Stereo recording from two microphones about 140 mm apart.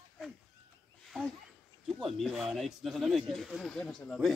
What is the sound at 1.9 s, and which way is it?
Speech, centre (ahead or behind).